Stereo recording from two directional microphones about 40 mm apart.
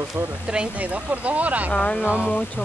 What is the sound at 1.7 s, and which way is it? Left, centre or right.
Speech, left.